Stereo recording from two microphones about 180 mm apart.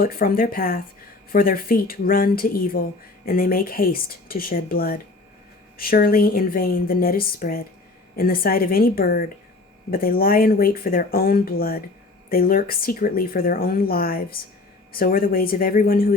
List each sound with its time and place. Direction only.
0.0 s a woman's voice: 55° left (ahead or behind)